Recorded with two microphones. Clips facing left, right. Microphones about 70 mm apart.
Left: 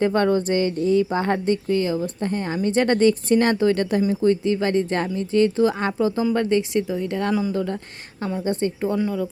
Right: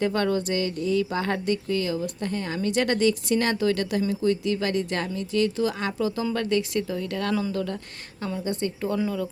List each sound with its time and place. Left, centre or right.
0.0 s speech: left
9.0 s speech: centre